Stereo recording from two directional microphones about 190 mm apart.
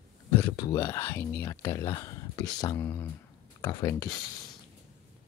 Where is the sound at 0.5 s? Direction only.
15° left (ahead or behind).